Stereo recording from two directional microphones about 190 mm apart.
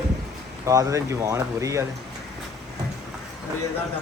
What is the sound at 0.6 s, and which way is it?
Speech, 20° right (ahead or behind).